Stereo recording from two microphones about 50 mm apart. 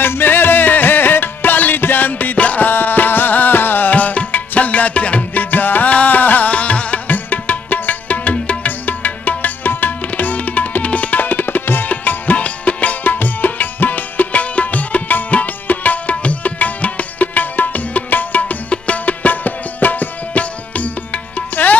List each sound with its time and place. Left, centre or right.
0.0 s music: left
2.7 s music: left
7.1 s music: left